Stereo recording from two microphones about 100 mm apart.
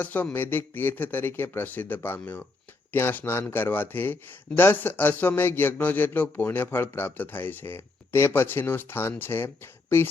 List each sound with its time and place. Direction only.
0.0 s a man's voice: 20° left (ahead or behind)